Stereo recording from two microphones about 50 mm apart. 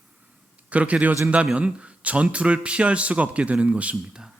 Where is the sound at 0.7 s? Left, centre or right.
Right.